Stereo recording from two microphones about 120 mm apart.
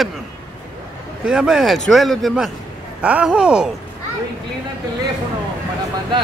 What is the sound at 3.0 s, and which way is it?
Speech, 10° right (ahead or behind).